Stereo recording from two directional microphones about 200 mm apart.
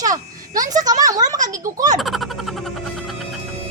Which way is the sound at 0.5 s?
15° right (ahead or behind).